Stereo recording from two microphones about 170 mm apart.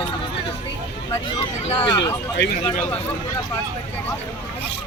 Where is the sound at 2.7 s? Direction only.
15° left (ahead or behind).